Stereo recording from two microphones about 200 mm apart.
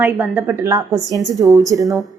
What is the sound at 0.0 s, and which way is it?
A woman's voice, 10° right (ahead or behind).